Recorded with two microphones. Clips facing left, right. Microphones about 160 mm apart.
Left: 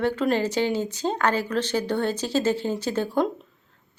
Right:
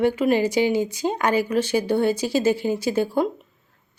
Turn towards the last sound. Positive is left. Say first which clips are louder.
# right 2 dB
turn(degrees=-10)  # may be behind; listen again after turning